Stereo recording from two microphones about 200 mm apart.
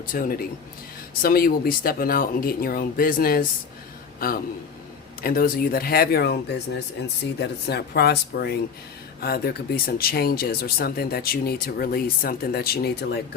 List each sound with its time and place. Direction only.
0.0 s speech: 45° left (ahead or behind)